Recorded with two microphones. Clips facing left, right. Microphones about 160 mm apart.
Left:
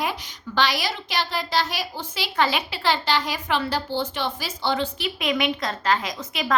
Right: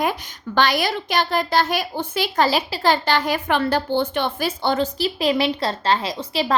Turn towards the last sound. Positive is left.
turn(degrees=-30)  # may be behind; listen again after turning